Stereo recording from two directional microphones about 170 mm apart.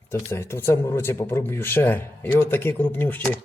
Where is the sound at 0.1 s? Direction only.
15° left (ahead or behind).